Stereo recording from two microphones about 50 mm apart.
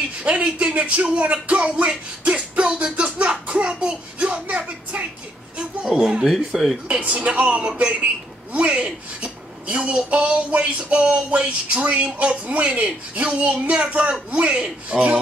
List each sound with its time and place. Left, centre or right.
0.2 s a woman's voice: right
2.2 s music: right
5.9 s speech: centre
6.3 s speech: centre
6.9 s a woman's voice: right